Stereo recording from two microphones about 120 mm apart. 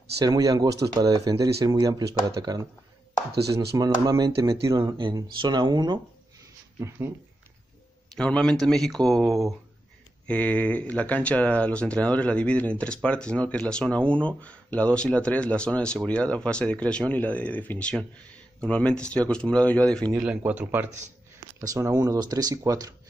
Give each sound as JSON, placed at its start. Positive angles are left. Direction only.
{"t": 0.2, "sound": "speech", "side_deg": -30}
{"t": 3.7, "sound": "speech", "side_deg": -30}
{"t": 4.9, "sound": "speech", "side_deg": -40}
{"t": 8.2, "sound": "speech", "side_deg": 5}
{"t": 10.2, "sound": "speech", "side_deg": 10}
{"t": 20.2, "sound": "speech", "side_deg": -10}
{"t": 21.5, "sound": "speech", "side_deg": -25}